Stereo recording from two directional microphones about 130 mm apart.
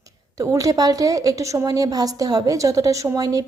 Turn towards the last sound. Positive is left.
turn(degrees=-30)  # may be behind; listen again after turning